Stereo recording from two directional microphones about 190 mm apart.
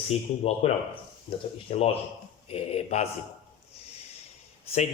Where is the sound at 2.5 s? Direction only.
30° left (ahead or behind).